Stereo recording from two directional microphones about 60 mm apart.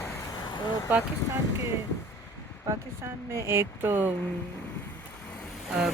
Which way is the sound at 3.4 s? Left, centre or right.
Right.